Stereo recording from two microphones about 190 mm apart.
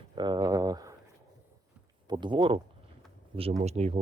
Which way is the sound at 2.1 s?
25° right (ahead or behind).